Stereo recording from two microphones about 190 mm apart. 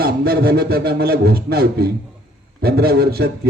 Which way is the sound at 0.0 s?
55° right (ahead or behind).